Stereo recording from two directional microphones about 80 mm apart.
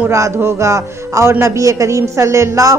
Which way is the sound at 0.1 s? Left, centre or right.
Right.